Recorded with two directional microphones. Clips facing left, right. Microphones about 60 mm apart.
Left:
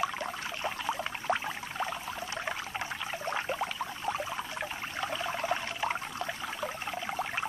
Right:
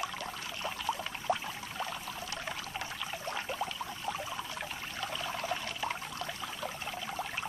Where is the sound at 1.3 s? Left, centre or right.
Left.